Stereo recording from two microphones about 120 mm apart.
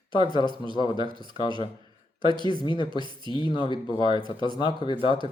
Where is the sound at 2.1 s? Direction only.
45° right (ahead or behind).